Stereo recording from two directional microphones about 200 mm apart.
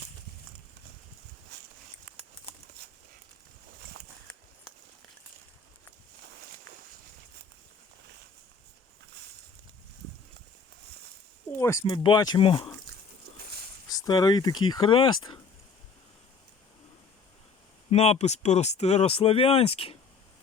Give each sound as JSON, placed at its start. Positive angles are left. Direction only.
{"t": 11.6, "sound": "speech", "side_deg": 15}
{"t": 13.9, "sound": "speech", "side_deg": 20}
{"t": 17.9, "sound": "speech", "side_deg": 30}